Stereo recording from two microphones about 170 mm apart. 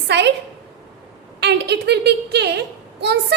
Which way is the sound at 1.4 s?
80° right.